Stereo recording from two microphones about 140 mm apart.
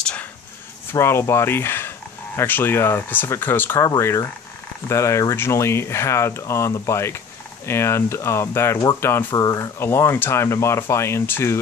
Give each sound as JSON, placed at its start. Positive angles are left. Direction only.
{"t": 0.0, "sound": "a sound", "side_deg": 10}
{"t": 0.9, "sound": "speech", "side_deg": 20}
{"t": 9.4, "sound": "speech", "side_deg": 30}
{"t": 9.8, "sound": "speech", "side_deg": 15}